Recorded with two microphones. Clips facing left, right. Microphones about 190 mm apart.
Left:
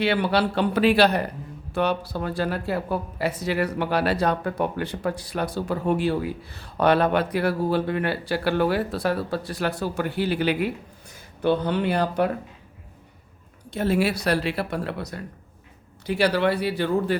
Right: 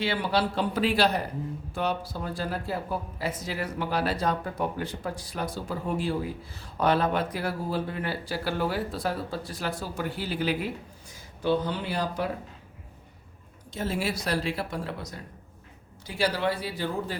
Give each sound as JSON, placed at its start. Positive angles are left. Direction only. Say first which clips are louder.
{"t": 0.0, "sound": "speech", "louder": "left 5 dB", "side_deg": 65}
{"t": 13.7, "sound": "speech", "louder": "left 7 dB", "side_deg": 65}